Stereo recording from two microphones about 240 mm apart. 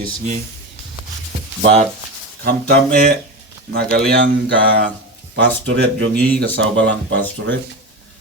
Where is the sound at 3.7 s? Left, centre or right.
Right.